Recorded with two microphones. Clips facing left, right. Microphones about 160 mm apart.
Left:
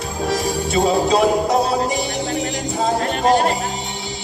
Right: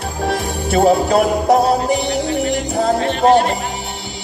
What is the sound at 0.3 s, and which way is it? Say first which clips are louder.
Music: right 1 dB; 60° right (ahead or behind).